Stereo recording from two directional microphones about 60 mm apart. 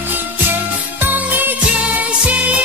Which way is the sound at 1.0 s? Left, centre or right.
Right.